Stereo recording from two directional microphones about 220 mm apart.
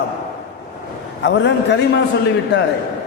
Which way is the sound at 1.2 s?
55° left (ahead or behind).